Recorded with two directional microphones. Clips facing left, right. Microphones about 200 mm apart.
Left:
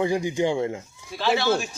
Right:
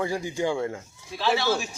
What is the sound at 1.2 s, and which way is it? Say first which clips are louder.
Speech: left 2 dB; centre (ahead or behind).